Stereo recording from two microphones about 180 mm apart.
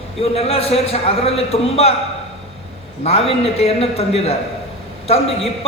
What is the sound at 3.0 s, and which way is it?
A man's voice, 35° left (ahead or behind).